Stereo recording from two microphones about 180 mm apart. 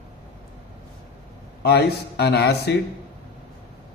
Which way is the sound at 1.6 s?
65° left (ahead or behind).